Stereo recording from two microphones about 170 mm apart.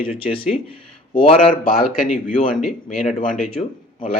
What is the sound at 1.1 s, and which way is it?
Speech, 35° left (ahead or behind).